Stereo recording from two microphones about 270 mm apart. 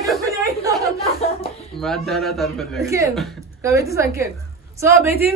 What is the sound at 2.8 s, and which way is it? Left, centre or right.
Speech, centre.